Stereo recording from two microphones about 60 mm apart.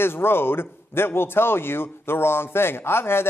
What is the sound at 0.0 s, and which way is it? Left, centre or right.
Speech, left.